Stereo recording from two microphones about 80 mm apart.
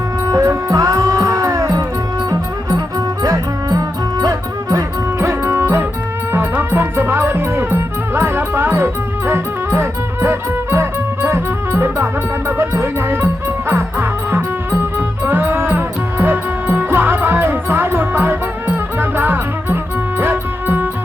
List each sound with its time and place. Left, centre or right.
0.3 s music: right
5.2 s music: right